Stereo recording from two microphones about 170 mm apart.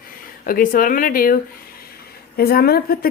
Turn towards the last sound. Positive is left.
turn(degrees=60)  # may be behind; listen again after turning